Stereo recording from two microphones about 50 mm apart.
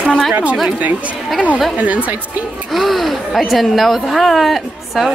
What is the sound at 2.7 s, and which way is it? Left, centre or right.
Speech, centre.